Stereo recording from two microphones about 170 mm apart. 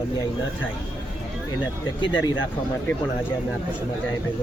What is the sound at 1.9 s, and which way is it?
Speech, 30° left (ahead or behind).